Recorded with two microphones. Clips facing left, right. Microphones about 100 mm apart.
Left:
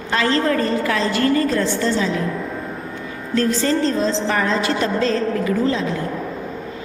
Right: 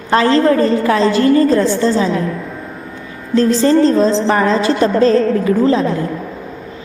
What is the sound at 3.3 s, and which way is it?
A woman's voice, 30° right (ahead or behind).